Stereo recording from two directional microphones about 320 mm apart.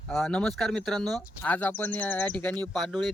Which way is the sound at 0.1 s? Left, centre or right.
Centre.